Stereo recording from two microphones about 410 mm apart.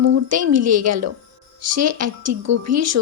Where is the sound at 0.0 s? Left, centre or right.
Right.